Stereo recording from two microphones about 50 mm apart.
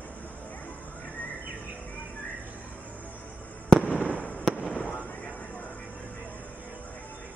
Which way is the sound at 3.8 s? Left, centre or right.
Left.